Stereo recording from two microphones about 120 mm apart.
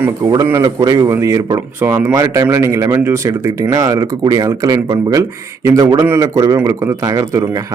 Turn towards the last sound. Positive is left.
turn(degrees=-25)  # may be behind; listen again after turning